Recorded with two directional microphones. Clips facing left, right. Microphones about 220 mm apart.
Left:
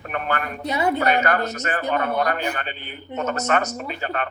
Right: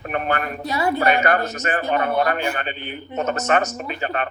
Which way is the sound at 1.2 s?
20° right (ahead or behind).